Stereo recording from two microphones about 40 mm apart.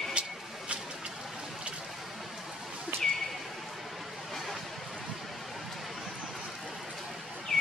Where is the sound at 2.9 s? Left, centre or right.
Right.